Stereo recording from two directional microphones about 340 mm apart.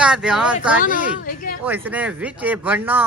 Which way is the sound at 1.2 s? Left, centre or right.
Left.